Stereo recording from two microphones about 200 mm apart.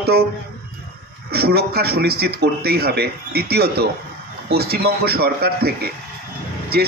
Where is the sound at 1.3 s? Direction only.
50° right (ahead or behind).